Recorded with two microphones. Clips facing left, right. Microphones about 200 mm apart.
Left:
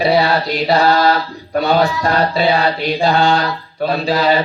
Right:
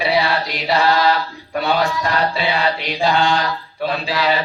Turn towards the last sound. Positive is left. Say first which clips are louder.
# left 5 dB
turn(degrees=40)  # may be behind; listen again after turning